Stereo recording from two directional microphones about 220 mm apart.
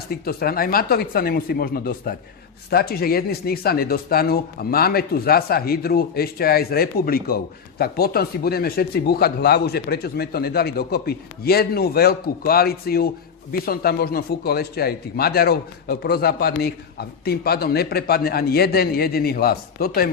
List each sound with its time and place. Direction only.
0.1 s speech: 45° left (ahead or behind)